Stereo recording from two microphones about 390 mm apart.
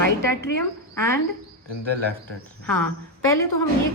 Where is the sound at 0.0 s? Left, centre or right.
Right.